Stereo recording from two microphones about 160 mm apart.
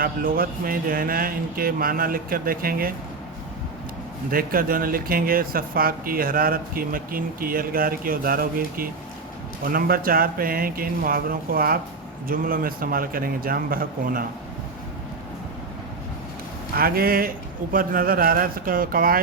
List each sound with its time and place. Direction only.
0.0 s speech: 65° right (ahead or behind)
4.3 s speech: 65° right (ahead or behind)
16.7 s speech: 70° right (ahead or behind)